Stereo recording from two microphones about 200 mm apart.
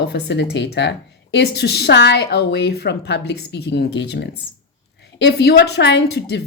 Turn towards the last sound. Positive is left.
turn(degrees=55)  # may be behind; listen again after turning